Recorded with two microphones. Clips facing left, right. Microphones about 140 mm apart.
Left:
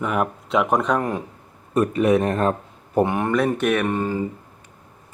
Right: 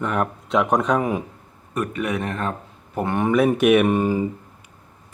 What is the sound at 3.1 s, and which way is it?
Speech, centre (ahead or behind).